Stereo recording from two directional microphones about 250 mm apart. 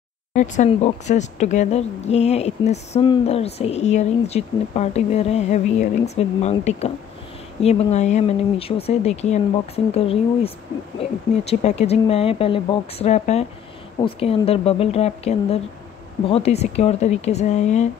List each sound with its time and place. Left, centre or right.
0.3 s speech: left
11.6 s speech: left